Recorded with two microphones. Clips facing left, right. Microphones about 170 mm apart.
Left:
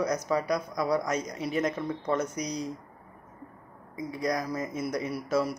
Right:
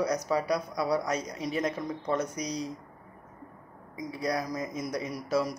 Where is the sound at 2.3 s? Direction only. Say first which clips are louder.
Left 1 dB; 30° right (ahead or behind).